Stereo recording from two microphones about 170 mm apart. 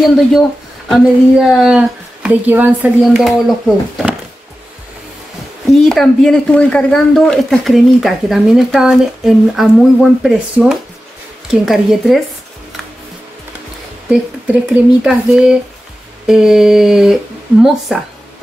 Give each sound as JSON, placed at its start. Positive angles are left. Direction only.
{"t": 0.0, "sound": "speech", "side_deg": 0}
{"t": 5.7, "sound": "speech", "side_deg": 0}
{"t": 14.0, "sound": "speech", "side_deg": -5}